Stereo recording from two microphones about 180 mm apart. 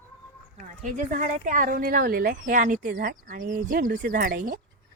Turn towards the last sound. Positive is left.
turn(degrees=-55)  # may be behind; listen again after turning